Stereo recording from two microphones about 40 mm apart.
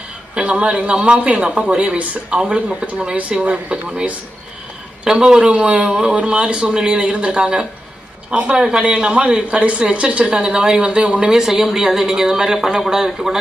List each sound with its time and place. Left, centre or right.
0.3 s speech: right
5.2 s speech: centre
5.5 s speech: right
7.4 s speech: centre
11.3 s a woman's voice: centre